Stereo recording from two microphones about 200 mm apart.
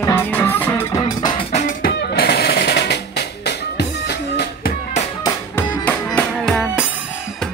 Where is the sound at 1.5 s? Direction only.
45° left (ahead or behind).